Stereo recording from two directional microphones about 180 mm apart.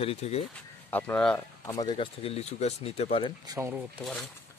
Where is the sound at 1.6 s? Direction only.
25° left (ahead or behind).